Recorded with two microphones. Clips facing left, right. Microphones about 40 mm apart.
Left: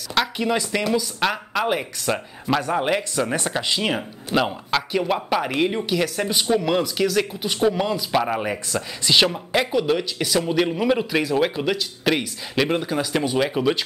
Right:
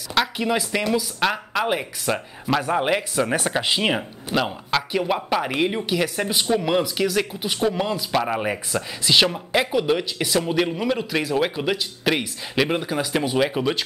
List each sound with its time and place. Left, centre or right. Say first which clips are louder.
0.1 s speech: even; centre
4.3 s speech: left 1 dB; centre